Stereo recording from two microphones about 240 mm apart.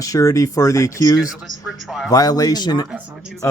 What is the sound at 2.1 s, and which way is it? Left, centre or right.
Speech, centre.